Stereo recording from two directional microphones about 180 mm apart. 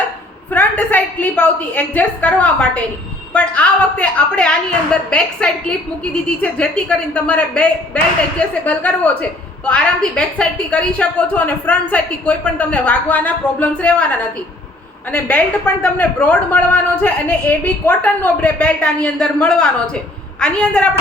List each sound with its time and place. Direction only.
0.5 s a woman's voice: 10° left (ahead or behind)